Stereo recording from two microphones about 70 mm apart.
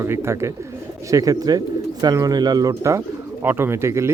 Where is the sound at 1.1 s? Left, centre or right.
Right.